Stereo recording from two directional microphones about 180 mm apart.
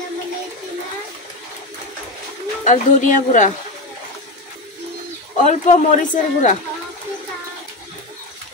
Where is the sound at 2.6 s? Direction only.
45° left (ahead or behind).